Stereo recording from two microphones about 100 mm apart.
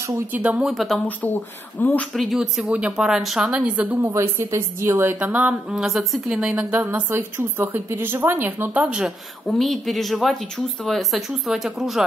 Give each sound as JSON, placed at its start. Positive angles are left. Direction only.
{"t": 0.3, "sound": "speech", "side_deg": -15}
{"t": 0.7, "sound": "speech", "side_deg": 0}
{"t": 1.0, "sound": "speech", "side_deg": 15}
{"t": 2.1, "sound": "speech", "side_deg": -5}
{"t": 4.0, "sound": "a woman's voice", "side_deg": -25}
{"t": 9.5, "sound": "speech", "side_deg": 0}